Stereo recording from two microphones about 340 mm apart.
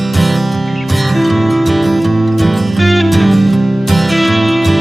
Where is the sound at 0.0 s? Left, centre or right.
Centre.